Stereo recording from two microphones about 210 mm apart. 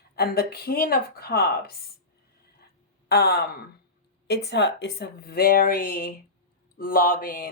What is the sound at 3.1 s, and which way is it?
Speech, 50° left (ahead or behind).